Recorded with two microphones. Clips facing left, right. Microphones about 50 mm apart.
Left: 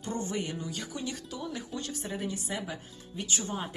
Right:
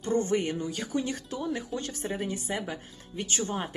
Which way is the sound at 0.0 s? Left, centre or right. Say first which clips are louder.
Right 7 dB; right.